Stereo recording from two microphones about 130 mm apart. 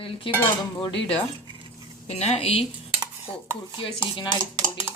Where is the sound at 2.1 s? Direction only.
55° left (ahead or behind).